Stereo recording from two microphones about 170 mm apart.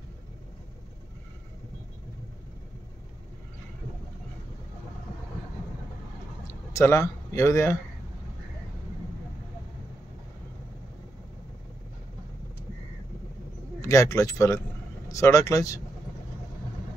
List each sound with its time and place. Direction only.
6.4 s a man's voice: 15° left (ahead or behind)
13.7 s speech: 15° left (ahead or behind)